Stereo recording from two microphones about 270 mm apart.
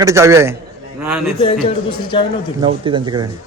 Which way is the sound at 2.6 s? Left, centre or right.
Centre.